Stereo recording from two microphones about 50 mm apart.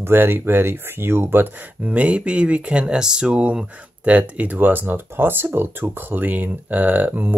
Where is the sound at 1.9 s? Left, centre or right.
Right.